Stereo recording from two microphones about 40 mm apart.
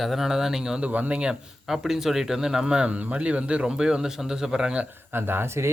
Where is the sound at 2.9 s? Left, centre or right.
Right; by 4.7 s centre.